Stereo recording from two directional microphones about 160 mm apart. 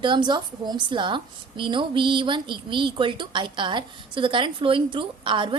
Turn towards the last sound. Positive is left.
turn(degrees=-30)  # may be behind; listen again after turning